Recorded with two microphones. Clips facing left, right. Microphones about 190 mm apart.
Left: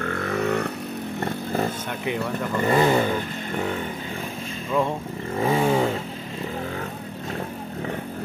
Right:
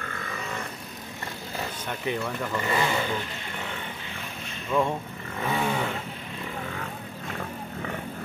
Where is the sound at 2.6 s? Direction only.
55° left (ahead or behind).